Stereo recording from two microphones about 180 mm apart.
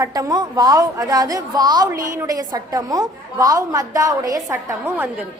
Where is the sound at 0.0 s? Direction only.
20° right (ahead or behind).